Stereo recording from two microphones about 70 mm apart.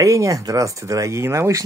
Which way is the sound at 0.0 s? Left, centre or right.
Right.